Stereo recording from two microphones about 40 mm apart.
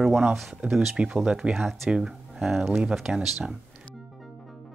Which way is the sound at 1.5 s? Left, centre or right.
Centre.